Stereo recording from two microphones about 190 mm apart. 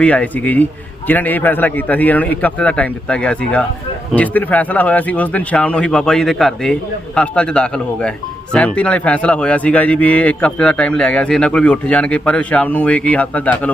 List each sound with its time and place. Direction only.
0.0 s a man's voice: 5° left (ahead or behind)